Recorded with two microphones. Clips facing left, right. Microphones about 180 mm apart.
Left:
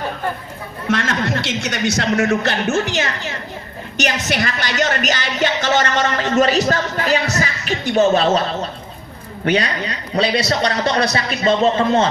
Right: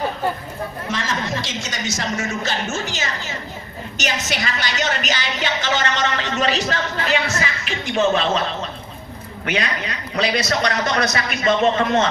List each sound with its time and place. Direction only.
0.8 s a man's voice: 65° left (ahead or behind); by 12.1 s 30° left (ahead or behind)